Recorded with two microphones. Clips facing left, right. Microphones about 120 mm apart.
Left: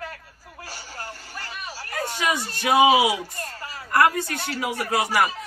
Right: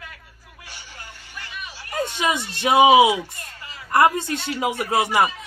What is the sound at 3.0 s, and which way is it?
Speech, 40° left (ahead or behind).